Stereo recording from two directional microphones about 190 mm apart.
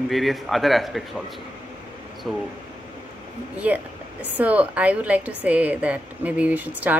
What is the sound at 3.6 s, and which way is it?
Speech, 5° right (ahead or behind).